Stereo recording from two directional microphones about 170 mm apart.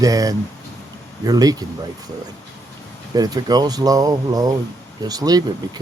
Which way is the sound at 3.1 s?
25° right (ahead or behind).